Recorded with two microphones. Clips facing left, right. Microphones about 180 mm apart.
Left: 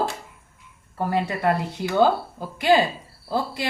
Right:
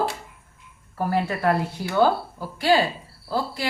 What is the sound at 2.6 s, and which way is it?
A woman's voice, 20° left (ahead or behind).